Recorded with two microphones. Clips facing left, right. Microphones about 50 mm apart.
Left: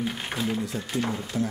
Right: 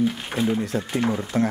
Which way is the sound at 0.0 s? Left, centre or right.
Centre.